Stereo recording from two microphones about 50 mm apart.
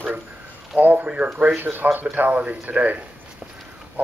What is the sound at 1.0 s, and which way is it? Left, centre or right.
Speech, right.